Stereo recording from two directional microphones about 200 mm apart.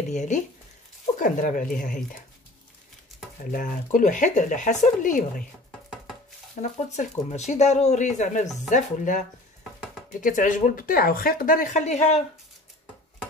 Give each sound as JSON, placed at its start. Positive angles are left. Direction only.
{"t": 0.1, "sound": "speech", "side_deg": 35}
{"t": 3.5, "sound": "speech", "side_deg": 40}
{"t": 6.5, "sound": "speech", "side_deg": 35}
{"t": 10.2, "sound": "speech", "side_deg": 40}